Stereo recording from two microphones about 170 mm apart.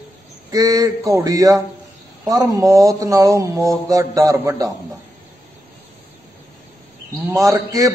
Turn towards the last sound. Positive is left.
turn(degrees=-20)  # may be behind; listen again after turning